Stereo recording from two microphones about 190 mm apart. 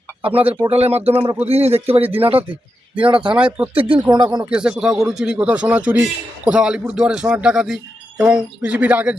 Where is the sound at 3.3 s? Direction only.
5° right (ahead or behind).